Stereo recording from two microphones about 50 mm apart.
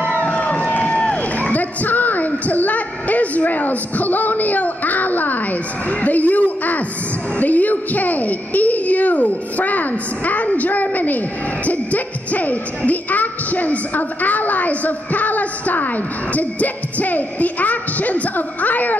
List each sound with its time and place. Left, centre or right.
0.2 s run: centre
1.1 s a sound: left
7.3 s speech: left